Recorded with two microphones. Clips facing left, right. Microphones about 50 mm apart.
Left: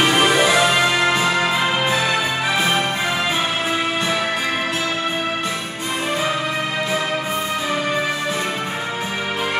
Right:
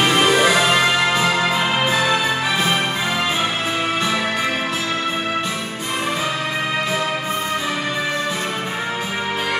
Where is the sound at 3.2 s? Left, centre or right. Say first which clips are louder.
Even; left.